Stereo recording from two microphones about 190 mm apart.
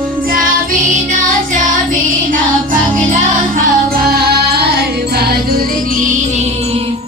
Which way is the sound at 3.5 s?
50° right (ahead or behind).